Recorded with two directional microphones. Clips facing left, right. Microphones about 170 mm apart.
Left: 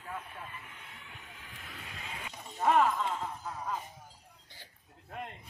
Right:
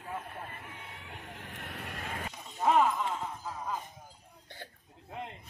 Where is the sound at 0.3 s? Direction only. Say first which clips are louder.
Right 3 dB; 45° right (ahead or behind).